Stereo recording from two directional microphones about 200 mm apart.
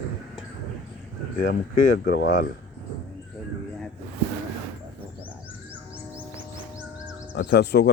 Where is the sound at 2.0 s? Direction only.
50° left (ahead or behind).